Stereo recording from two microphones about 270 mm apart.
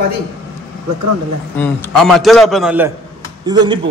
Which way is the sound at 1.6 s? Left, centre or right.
Centre.